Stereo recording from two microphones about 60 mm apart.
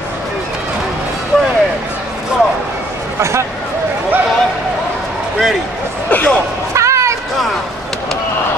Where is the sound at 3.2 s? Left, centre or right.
Right.